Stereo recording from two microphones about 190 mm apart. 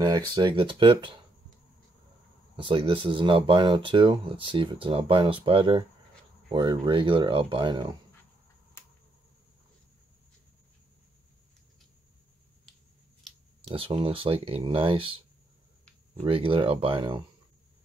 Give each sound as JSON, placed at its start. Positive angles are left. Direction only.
{"t": 0.3, "sound": "speech", "side_deg": -25}
{"t": 2.5, "sound": "speech", "side_deg": -25}
{"t": 13.7, "sound": "speech", "side_deg": -30}
{"t": 16.2, "sound": "speech", "side_deg": -30}